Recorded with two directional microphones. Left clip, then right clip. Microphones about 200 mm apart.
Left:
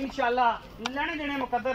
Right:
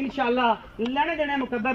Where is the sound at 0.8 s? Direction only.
50° right (ahead or behind).